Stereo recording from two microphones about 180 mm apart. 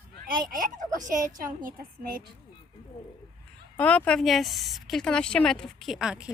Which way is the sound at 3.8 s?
5° left (ahead or behind).